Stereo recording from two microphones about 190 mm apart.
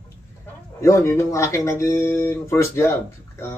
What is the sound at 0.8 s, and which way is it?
Speech, 15° left (ahead or behind).